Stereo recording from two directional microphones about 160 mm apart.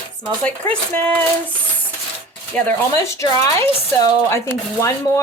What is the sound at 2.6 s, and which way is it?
Speech, 15° left (ahead or behind).